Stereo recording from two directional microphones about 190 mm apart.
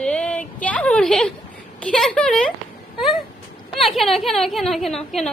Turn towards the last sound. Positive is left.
turn(degrees=0)  # may be behind; listen again after turning